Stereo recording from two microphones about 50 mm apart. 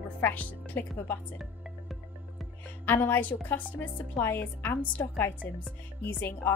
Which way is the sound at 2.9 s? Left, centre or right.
Left.